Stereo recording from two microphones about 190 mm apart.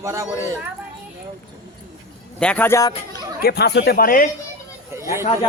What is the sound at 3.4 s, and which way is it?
Speech, 55° left (ahead or behind).